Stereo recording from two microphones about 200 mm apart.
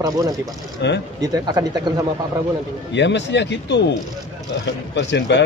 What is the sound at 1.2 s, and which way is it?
Speech, 20° right (ahead or behind).